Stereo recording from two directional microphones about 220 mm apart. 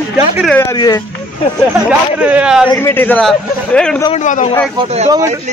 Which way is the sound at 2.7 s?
10° left (ahead or behind).